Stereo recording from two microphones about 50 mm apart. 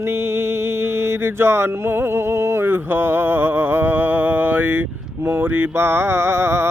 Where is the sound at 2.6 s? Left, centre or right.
Right.